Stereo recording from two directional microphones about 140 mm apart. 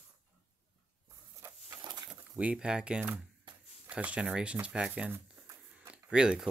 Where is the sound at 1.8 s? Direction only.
30° right (ahead or behind).